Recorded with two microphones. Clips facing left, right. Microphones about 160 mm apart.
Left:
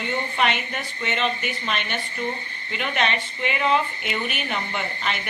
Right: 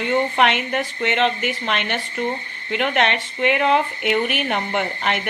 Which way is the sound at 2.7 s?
70° right (ahead or behind).